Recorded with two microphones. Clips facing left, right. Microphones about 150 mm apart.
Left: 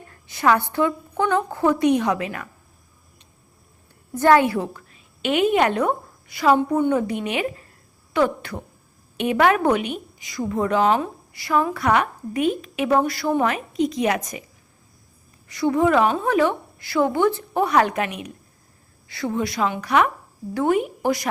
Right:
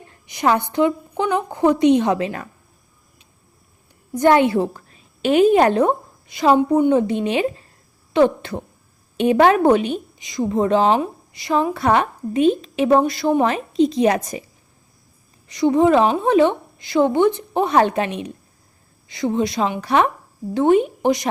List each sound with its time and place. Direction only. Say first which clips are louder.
0.1 s a woman's voice: right 1 dB; 20° right (ahead or behind)
4.1 s a woman's voice: right 2 dB; 20° right (ahead or behind)
15.4 s a woman's voice: right 4 dB; 20° right (ahead or behind)